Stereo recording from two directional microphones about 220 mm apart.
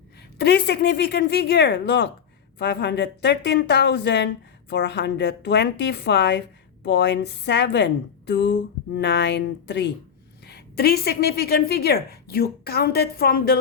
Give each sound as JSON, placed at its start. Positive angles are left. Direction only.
{"t": 0.3, "sound": "a woman's voice", "side_deg": 50}